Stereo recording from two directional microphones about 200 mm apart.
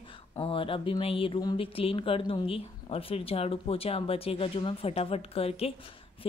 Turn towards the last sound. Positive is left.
turn(degrees=30)  # may be behind; listen again after turning